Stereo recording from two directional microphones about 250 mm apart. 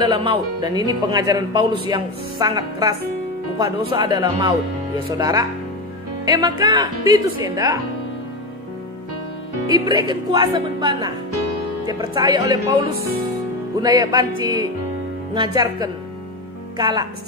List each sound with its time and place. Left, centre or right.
0.0 s speech: centre
9.7 s speech: centre
13.7 s speech: centre